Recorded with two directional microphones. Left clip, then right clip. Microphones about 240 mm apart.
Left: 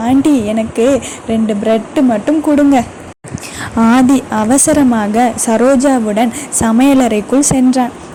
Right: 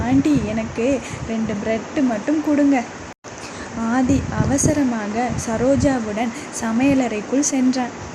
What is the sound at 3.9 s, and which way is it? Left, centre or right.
Speech, left.